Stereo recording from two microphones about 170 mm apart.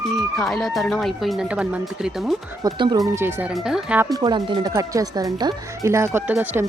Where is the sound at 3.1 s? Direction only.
15° right (ahead or behind).